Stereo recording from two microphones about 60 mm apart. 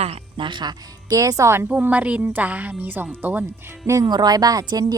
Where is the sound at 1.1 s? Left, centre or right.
Right.